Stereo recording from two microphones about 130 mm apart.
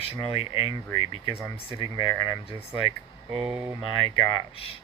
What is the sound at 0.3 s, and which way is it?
Speech, 45° left (ahead or behind).